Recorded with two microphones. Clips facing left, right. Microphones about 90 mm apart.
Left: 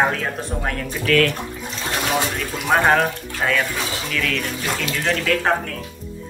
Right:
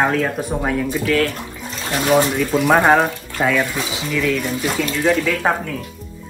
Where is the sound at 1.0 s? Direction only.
25° right (ahead or behind).